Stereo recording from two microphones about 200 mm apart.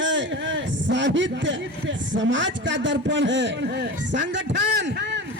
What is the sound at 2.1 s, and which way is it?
A man's voice, 65° right (ahead or behind).